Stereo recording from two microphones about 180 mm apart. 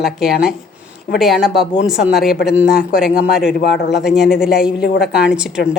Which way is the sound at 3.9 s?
Centre (ahead or behind).